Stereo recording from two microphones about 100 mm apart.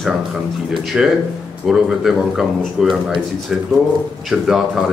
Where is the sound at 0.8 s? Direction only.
5° right (ahead or behind).